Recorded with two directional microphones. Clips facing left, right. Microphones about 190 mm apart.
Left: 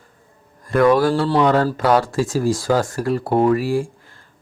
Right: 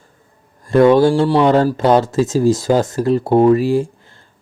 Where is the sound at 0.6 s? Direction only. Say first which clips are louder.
Right 5 dB; 25° right (ahead or behind).